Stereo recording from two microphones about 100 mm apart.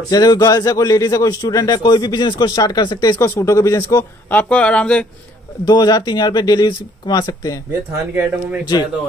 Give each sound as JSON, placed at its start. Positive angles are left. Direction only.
{"t": 0.1, "sound": "a man's voice", "side_deg": 40}
{"t": 4.3, "sound": "speech", "side_deg": 15}
{"t": 5.7, "sound": "speech", "side_deg": 45}
{"t": 7.9, "sound": "speech", "side_deg": -30}